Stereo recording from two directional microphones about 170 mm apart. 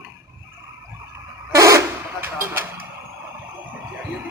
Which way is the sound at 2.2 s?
10° right (ahead or behind).